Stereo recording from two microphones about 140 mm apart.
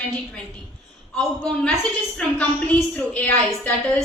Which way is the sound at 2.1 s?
10° left (ahead or behind).